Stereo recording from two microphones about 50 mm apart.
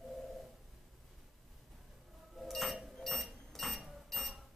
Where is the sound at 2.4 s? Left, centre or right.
Centre.